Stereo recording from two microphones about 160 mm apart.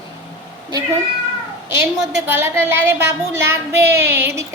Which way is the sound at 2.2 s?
15° right (ahead or behind).